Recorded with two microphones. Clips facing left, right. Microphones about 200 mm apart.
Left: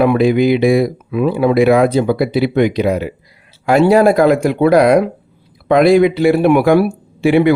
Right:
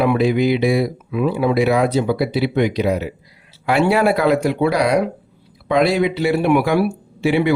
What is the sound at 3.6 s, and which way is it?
Speech, 40° left (ahead or behind).